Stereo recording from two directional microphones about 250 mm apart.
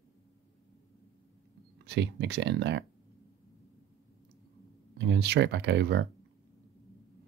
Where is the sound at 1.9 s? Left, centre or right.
Right.